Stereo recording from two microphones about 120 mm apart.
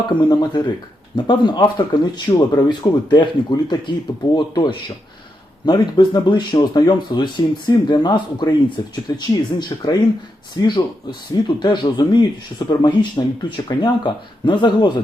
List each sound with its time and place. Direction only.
0.1 s speech: 40° left (ahead or behind)